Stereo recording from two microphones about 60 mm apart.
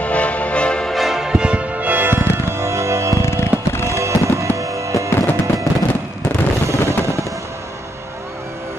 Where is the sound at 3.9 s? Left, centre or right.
Right.